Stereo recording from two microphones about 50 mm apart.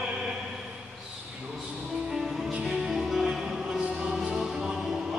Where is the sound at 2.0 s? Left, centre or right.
Centre.